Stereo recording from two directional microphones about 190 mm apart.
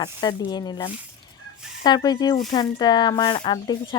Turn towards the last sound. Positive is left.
turn(degrees=25)  # may be behind; listen again after turning